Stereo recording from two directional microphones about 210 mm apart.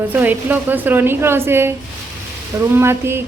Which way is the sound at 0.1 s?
10° right (ahead or behind).